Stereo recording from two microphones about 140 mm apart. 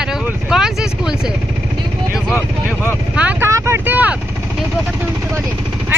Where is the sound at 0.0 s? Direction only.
5° right (ahead or behind).